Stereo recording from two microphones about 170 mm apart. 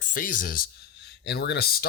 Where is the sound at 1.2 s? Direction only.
75° left (ahead or behind).